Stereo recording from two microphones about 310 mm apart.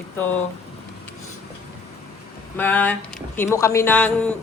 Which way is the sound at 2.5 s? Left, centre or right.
Centre.